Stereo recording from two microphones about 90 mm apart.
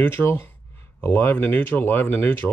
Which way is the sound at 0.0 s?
25° left (ahead or behind).